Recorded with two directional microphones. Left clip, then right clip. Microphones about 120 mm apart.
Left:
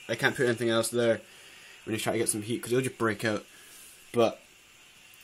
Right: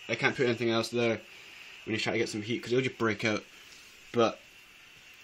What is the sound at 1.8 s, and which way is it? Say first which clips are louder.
Speech: left 1 dB; 20° left (ahead or behind).